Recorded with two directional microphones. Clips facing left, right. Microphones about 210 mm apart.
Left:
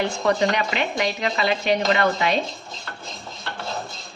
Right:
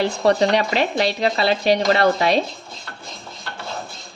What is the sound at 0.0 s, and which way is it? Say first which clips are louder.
Speech: right 4 dB; 35° right (ahead or behind).